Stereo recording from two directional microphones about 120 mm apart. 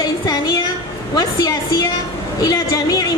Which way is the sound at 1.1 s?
30° left (ahead or behind).